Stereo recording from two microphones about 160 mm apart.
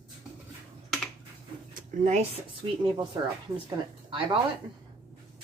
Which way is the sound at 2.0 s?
50° right (ahead or behind).